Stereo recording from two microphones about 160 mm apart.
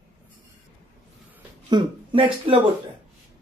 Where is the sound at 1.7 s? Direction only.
30° right (ahead or behind).